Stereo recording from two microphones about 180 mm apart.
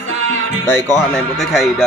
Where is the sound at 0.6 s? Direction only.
10° left (ahead or behind).